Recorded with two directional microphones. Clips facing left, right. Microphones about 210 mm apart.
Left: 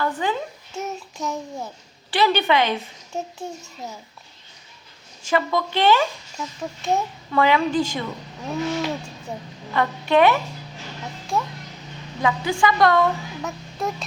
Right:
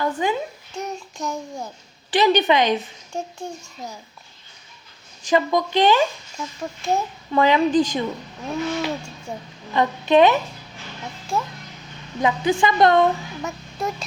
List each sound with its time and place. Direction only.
0.2 s a woman's voice: 15° right (ahead or behind)
0.7 s a child's voice: 5° left (ahead or behind)
2.0 s a woman's voice: 15° right (ahead or behind)
3.1 s a child's voice: 5° left (ahead or behind)
5.2 s a woman's voice: 15° right (ahead or behind)
6.6 s a child's voice: centre (ahead or behind)
7.3 s speech: 20° right (ahead or behind)
8.4 s a child's voice: centre (ahead or behind)
9.7 s speech: 20° right (ahead or behind)
11.3 s a child's voice: centre (ahead or behind)
12.2 s speech: 20° right (ahead or behind)
13.4 s music: centre (ahead or behind)